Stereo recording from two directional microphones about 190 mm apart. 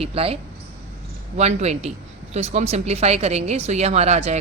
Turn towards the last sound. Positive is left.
turn(degrees=-35)  # may be behind; listen again after turning